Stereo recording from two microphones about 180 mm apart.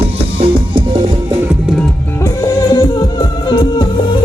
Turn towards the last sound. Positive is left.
turn(degrees=25)  # may be behind; listen again after turning